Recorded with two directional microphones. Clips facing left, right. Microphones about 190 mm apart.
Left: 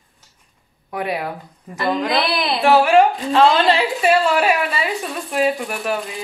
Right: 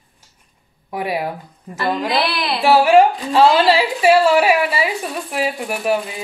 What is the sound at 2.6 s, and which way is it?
A woman's voice, 5° right (ahead or behind).